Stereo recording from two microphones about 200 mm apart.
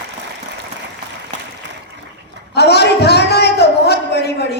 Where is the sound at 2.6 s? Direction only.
55° left (ahead or behind).